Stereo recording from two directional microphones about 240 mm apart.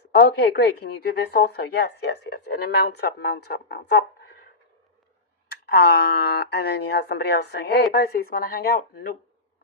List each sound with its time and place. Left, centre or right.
0.0 s a woman's voice: left
5.5 s a woman's voice: left